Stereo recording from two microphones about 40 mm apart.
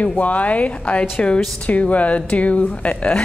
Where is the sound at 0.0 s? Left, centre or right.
Left.